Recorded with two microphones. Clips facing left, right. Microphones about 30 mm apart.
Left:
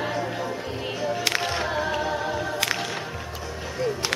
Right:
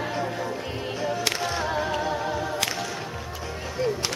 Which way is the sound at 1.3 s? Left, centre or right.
Left.